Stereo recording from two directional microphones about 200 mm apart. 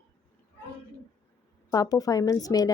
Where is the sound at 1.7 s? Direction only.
20° left (ahead or behind).